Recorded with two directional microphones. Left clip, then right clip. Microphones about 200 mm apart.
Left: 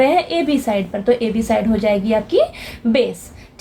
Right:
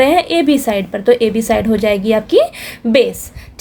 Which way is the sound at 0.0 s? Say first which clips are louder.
Right 4 dB; 45° right (ahead or behind).